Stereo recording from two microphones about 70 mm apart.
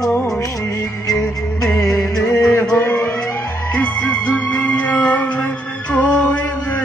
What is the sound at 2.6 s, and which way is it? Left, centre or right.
Music, left.